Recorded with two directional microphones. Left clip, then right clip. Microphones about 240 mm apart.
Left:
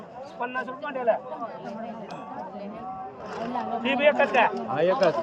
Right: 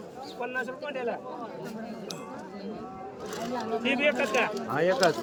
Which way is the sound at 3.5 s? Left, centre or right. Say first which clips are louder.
Left 2 dB; centre.